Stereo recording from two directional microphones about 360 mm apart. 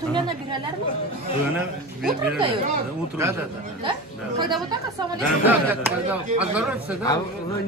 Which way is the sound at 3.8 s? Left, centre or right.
Centre.